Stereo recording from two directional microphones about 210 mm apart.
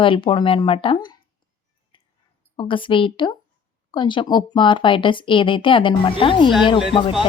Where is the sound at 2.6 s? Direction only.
25° left (ahead or behind).